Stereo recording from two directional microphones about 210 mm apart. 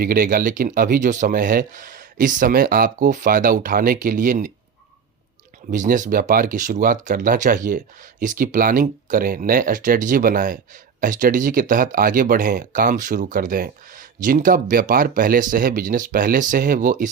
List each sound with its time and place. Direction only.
0.0 s speech: 45° right (ahead or behind)
5.7 s speech: 35° right (ahead or behind)